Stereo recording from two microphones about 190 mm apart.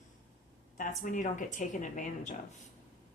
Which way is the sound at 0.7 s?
45° left (ahead or behind).